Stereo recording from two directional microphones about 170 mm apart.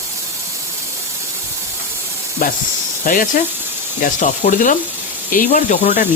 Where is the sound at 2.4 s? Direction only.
55° left (ahead or behind).